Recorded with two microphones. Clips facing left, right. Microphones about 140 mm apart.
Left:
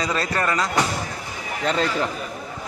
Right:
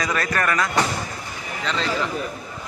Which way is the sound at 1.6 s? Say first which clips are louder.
Left 5 dB; 50° left (ahead or behind).